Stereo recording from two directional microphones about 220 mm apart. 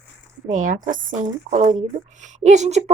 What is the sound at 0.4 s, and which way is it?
Speech, 35° right (ahead or behind).